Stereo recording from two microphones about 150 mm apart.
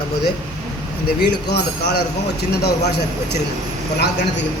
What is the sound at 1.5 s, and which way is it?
A man's voice, 90° left.